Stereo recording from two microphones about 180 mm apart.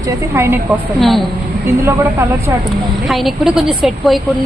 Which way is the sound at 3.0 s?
Centre (ahead or behind).